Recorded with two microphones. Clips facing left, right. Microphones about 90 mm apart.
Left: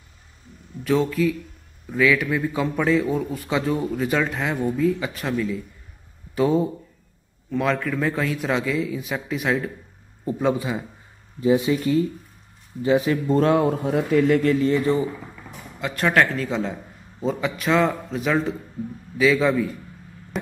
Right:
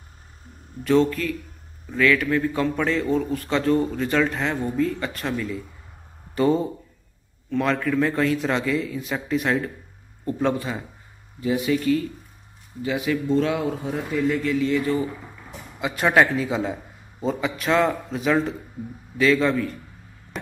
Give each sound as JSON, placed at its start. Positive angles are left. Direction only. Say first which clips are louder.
{"t": 0.8, "sound": "a man's voice", "louder": "right 1 dB", "side_deg": 0}
{"t": 10.2, "sound": "a man's voice", "louder": "left 1 dB", "side_deg": 10}
{"t": 11.4, "sound": "speech", "louder": "left 2 dB", "side_deg": 25}
{"t": 12.8, "sound": "speech", "louder": "left 4 dB", "side_deg": 35}
{"t": 13.9, "sound": "a man's voice", "louder": "left 6 dB", "side_deg": 75}
{"t": 14.4, "sound": "a man's voice", "louder": "left 3 dB", "side_deg": 40}
{"t": 15.8, "sound": "a man's voice", "louder": "right 1 dB", "side_deg": -10}